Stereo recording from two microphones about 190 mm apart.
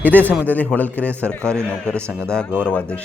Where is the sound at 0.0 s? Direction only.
10° left (ahead or behind).